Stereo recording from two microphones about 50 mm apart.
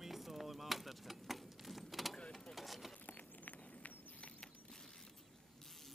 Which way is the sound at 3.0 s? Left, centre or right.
Left.